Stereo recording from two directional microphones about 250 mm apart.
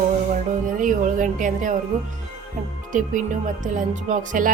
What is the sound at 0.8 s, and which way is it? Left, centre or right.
Speech, right.